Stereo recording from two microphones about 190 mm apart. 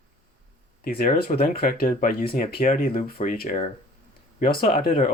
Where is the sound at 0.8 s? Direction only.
50° left (ahead or behind).